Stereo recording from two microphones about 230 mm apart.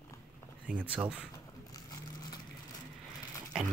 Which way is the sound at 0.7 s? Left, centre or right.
Centre.